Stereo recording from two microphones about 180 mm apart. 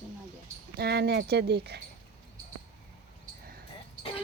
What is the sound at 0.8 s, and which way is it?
A woman's voice, 65° right (ahead or behind).